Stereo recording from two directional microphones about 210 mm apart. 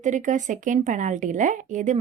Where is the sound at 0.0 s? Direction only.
35° right (ahead or behind).